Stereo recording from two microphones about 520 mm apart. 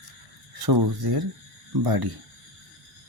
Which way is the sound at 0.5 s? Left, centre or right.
Right.